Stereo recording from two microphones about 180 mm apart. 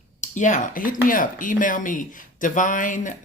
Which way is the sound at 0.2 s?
45° left (ahead or behind).